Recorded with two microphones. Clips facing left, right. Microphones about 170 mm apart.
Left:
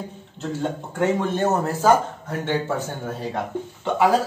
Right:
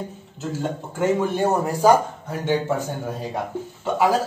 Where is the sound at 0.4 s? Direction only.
5° right (ahead or behind).